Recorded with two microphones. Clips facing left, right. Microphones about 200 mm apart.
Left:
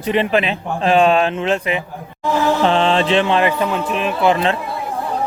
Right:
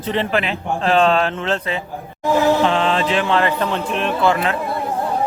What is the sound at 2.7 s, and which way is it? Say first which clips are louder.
Music: left 3 dB; 30° left (ahead or behind).